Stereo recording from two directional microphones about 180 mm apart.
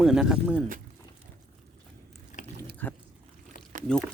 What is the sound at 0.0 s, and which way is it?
Speech, centre (ahead or behind).